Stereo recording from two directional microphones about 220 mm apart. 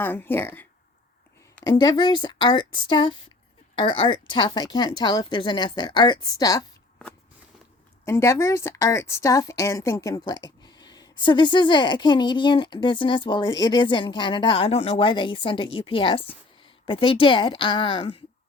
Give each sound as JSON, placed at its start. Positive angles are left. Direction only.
{"t": 0.0, "sound": "a woman's voice", "side_deg": 10}
{"t": 8.0, "sound": "a woman's voice", "side_deg": 15}